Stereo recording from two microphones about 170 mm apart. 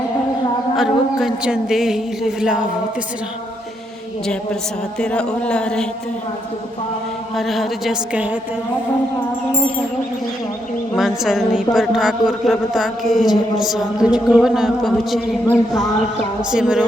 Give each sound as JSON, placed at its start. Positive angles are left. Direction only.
{"t": 0.8, "sound": "a woman's voice", "side_deg": 0}
{"t": 4.9, "sound": "a woman's voice", "side_deg": 5}
{"t": 7.3, "sound": "a woman's voice", "side_deg": 0}
{"t": 10.9, "sound": "a woman's voice", "side_deg": 0}